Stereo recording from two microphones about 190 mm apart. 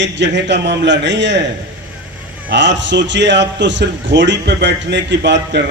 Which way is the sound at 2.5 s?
70° right (ahead or behind).